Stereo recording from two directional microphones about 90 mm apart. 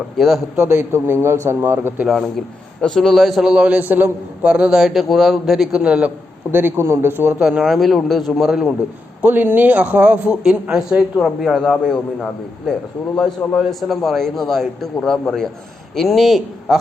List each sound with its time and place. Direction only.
0.2 s a man's voice: centre (ahead or behind)
0.5 s a man's voice: 25° right (ahead or behind)
2.8 s a man's voice: 5° left (ahead or behind)
5.8 s a man's voice: 10° right (ahead or behind)
6.5 s a man's voice: 25° right (ahead or behind)
7.3 s a man's voice: 10° right (ahead or behind)
7.6 s a man's voice: centre (ahead or behind)
9.2 s a man's voice: 20° right (ahead or behind)
11.2 s a man's voice: 5° left (ahead or behind)